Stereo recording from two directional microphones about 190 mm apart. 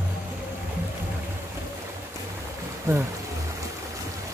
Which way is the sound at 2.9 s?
15° right (ahead or behind).